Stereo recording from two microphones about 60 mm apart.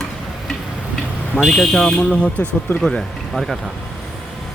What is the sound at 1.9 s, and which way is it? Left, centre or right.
Speech, centre.